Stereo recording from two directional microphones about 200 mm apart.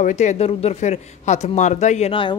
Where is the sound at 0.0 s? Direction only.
35° left (ahead or behind).